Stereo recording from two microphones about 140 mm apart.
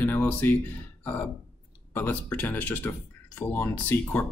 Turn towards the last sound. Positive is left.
turn(degrees=15)  # may be behind; listen again after turning